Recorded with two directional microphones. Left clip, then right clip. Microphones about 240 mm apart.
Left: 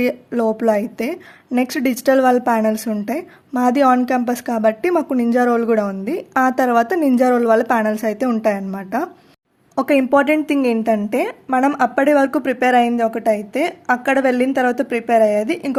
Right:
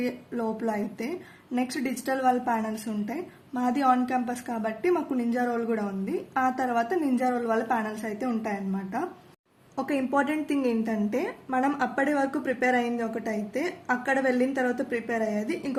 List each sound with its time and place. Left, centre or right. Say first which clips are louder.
0.0 s speech: left 12 dB; left